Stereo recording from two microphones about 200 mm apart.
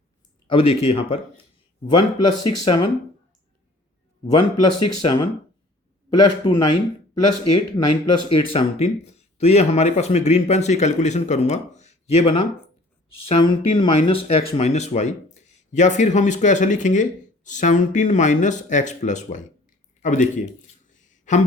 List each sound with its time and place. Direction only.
0.4 s speech: 25° left (ahead or behind)
4.3 s a man's voice: 20° left (ahead or behind)
8.5 s speech: 30° left (ahead or behind)
20.9 s a sound: 40° left (ahead or behind)